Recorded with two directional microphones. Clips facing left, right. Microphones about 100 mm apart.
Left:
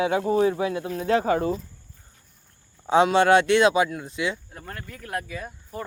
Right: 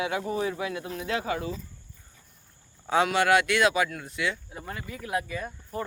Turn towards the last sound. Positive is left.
turn(degrees=0)  # may be behind; listen again after turning